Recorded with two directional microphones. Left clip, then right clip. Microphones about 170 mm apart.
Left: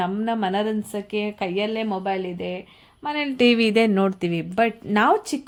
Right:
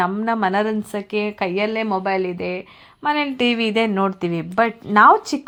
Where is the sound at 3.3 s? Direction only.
30° left (ahead or behind); by 5.2 s 10° left (ahead or behind).